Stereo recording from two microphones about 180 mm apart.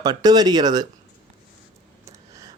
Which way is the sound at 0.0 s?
20° right (ahead or behind).